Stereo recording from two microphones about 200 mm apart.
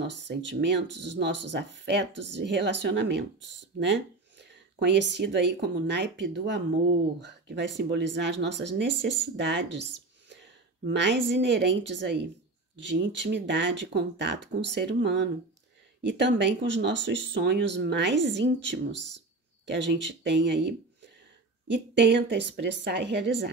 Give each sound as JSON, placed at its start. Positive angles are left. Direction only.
{"t": 0.0, "sound": "speech", "side_deg": -60}
{"t": 10.3, "sound": "a sound", "side_deg": -60}
{"t": 11.3, "sound": "speech", "side_deg": -65}